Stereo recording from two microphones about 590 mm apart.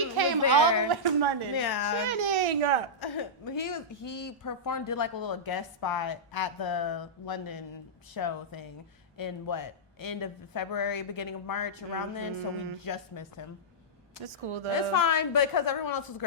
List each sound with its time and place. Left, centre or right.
0.2 s a sound: right
0.5 s a woman's voice: right
1.5 s a woman's voice: left
2.3 s speech: right
3.0 s a woman's voice: left
14.3 s a woman's voice: right
14.7 s a woman's voice: left